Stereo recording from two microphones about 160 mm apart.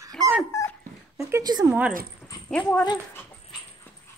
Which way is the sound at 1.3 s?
25° right (ahead or behind).